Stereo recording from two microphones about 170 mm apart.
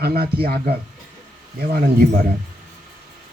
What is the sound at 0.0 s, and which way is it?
A man's voice, 70° right (ahead or behind).